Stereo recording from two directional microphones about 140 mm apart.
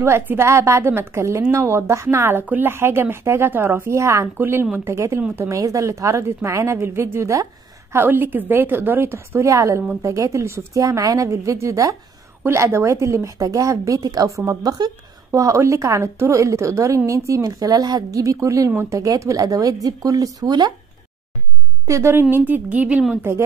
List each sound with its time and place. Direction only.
0.0 s a woman's voice: 20° right (ahead or behind)
21.8 s a woman's voice: 20° right (ahead or behind)